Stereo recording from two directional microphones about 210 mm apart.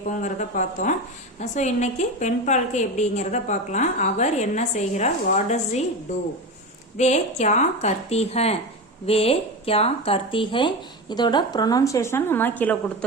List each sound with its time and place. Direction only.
0.2 s a woman's voice: 35° left (ahead or behind); by 12.7 s 10° left (ahead or behind)